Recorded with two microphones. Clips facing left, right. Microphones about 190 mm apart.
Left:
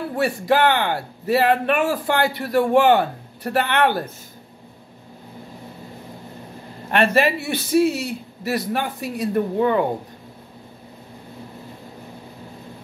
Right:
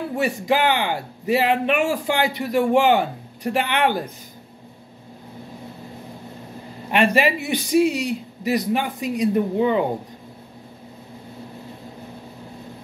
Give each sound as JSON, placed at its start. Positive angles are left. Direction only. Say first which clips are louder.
{"t": 0.2, "sound": "a man's voice", "louder": "left 2 dB", "side_deg": -15}
{"t": 6.9, "sound": "a man's voice", "louder": "even", "side_deg": -15}